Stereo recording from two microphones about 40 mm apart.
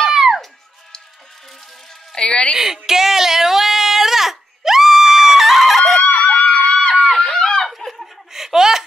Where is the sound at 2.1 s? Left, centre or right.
Left.